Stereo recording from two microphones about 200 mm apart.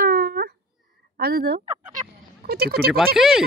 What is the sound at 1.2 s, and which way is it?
Speech, 50° right (ahead or behind).